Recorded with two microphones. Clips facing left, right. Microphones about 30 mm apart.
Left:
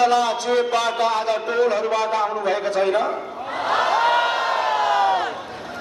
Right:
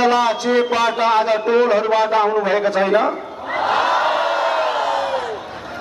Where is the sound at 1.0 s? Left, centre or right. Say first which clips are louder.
Right 5 dB; right.